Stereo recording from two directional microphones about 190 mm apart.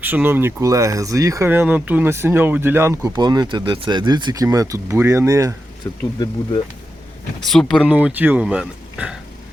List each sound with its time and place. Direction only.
0.0 s speech: 10° right (ahead or behind)
5.8 s speech: 15° left (ahead or behind)
7.4 s speech: 5° left (ahead or behind)
7.9 s speech: 10° right (ahead or behind)